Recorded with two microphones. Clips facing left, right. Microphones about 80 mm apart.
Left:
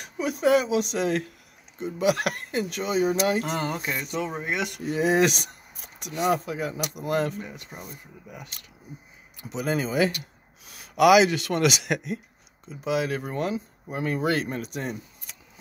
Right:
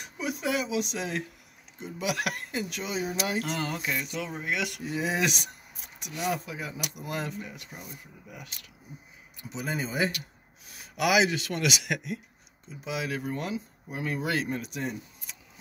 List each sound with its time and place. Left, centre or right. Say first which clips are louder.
0.0 s speech: left 7 dB; left
1.8 s speech: left 7 dB; left
3.2 s speech: left 5 dB; left
4.8 s speech: left 9 dB; left
7.4 s speech: left 3 dB; left
9.4 s speech: left 6 dB; left
10.7 s speech: left 9 dB; left
12.6 s speech: left 7 dB; left